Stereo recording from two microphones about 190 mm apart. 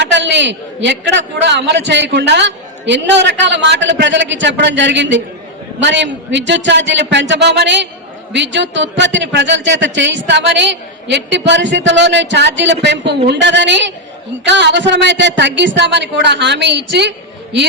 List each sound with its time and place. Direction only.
0.0 s a man's voice: 70° right (ahead or behind)